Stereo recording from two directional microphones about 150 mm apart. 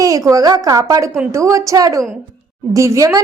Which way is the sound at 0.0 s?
25° right (ahead or behind).